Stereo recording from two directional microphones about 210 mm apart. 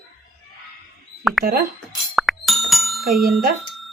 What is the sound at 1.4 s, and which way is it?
Speech, 45° right (ahead or behind).